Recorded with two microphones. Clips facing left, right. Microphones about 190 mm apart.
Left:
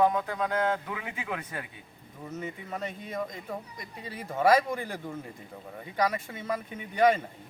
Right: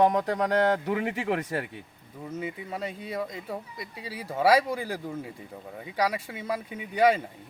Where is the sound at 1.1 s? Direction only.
75° right (ahead or behind).